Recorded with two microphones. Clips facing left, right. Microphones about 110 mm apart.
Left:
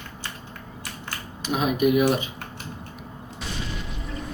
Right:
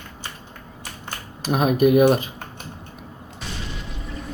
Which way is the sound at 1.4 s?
45° right (ahead or behind).